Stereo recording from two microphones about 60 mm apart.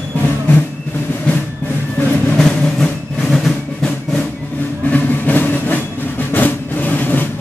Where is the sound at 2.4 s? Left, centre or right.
Centre.